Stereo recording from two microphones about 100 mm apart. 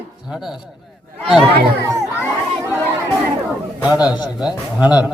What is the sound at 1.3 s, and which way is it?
Speech, 5° right (ahead or behind).